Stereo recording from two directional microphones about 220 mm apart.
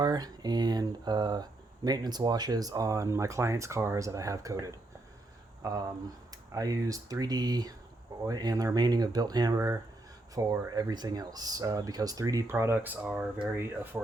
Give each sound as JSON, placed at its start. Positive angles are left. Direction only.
{"t": 0.0, "sound": "speech", "side_deg": -15}